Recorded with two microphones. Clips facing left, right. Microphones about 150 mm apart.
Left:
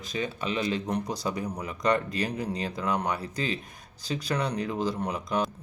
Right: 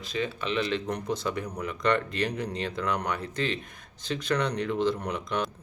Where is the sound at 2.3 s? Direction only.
10° left (ahead or behind).